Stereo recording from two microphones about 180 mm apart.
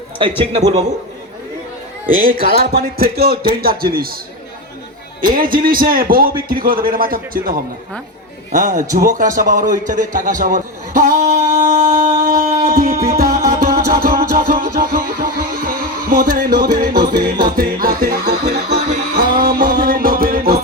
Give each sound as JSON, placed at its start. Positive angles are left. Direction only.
{"t": 0.2, "sound": "a man's voice", "side_deg": -30}
{"t": 2.2, "sound": "speech", "side_deg": -55}
{"t": 5.2, "sound": "a man's voice", "side_deg": -50}
{"t": 8.5, "sound": "a man's voice", "side_deg": -50}
{"t": 12.2, "sound": "a sound", "side_deg": -50}
{"t": 13.1, "sound": "music", "side_deg": -50}